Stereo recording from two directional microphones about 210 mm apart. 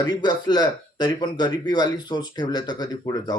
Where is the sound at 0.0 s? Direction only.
20° left (ahead or behind).